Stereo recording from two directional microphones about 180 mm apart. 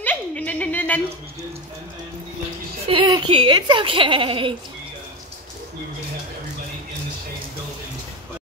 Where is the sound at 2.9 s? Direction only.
30° right (ahead or behind).